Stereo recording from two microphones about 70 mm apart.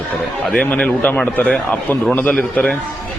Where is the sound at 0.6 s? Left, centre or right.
Left.